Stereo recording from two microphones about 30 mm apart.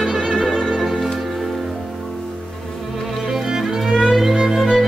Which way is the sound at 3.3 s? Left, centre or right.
Centre.